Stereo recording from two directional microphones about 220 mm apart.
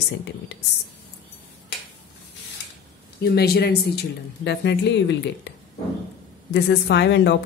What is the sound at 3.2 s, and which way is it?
A woman's voice, 45° left (ahead or behind).